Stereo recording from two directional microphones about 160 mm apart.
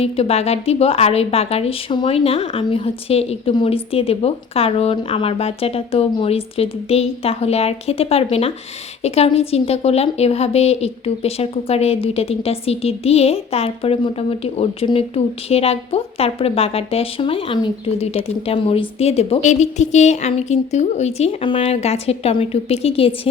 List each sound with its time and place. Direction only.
0.0 s a woman's voice: 40° left (ahead or behind)